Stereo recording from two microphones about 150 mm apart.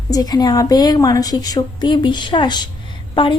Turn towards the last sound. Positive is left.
turn(degrees=35)  # may be behind; listen again after turning